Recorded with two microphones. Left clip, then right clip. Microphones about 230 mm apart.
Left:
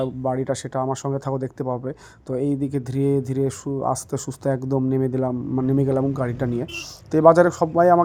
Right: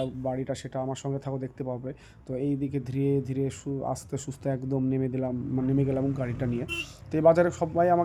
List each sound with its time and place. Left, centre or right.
0.2 s speech: centre